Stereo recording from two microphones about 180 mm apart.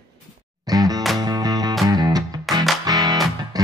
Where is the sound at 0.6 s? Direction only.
20° right (ahead or behind).